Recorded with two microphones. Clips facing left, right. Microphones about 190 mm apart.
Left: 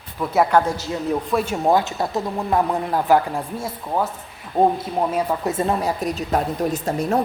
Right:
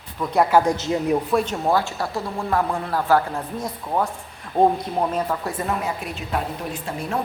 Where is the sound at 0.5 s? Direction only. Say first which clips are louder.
Right 1 dB; 15° right (ahead or behind).